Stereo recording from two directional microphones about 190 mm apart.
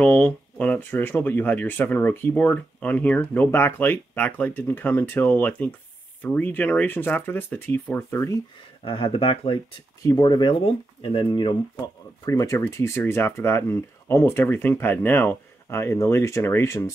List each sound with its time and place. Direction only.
0.0 s speech: 10° left (ahead or behind)
8.8 s speech: 25° left (ahead or behind)